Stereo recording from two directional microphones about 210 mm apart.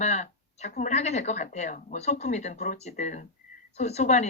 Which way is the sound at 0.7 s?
35° left (ahead or behind).